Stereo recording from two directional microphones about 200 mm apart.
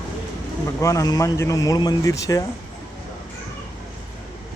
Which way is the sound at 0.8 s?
15° left (ahead or behind).